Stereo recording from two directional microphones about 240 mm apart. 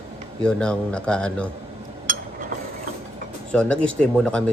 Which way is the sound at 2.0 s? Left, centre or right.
Right.